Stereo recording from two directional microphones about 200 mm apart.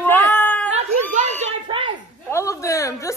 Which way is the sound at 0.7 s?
30° right (ahead or behind).